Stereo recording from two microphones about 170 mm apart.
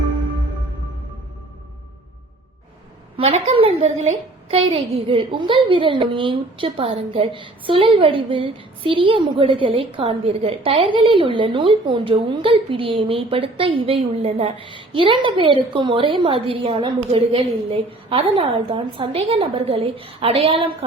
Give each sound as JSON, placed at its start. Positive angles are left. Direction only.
{"t": 3.2, "sound": "a woman's voice", "side_deg": -40}